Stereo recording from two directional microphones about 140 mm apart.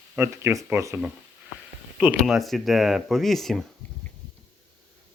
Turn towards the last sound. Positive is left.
turn(degrees=0)  # may be behind; listen again after turning